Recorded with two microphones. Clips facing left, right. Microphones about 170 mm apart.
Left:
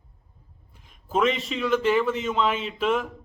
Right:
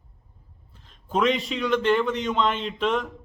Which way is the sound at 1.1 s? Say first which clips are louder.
Right 1 dB; centre (ahead or behind).